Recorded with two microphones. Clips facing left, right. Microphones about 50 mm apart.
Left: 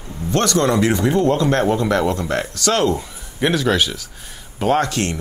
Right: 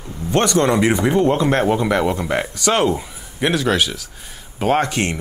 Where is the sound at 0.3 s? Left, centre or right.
Right.